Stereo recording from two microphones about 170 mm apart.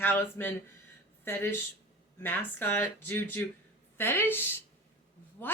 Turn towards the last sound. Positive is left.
turn(degrees=10)  # may be behind; listen again after turning